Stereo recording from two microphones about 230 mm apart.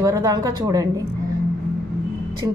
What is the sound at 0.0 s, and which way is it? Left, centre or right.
A woman's voice, centre.